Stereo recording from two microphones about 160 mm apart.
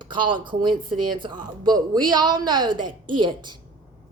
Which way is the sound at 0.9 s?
30° right (ahead or behind).